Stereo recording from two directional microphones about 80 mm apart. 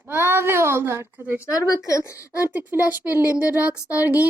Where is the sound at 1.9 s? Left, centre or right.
Left.